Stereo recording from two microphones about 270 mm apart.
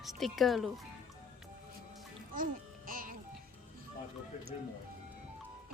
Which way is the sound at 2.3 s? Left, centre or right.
Right.